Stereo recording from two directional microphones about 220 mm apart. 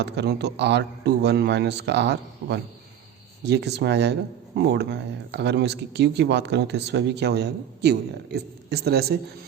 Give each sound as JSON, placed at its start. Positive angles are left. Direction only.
{"t": 0.0, "sound": "speech", "side_deg": -50}